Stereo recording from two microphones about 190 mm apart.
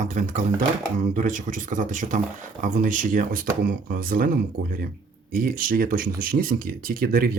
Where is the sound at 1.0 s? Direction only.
45° right (ahead or behind).